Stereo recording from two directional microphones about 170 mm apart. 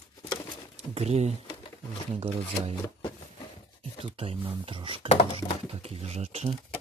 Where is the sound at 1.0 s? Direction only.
40° right (ahead or behind).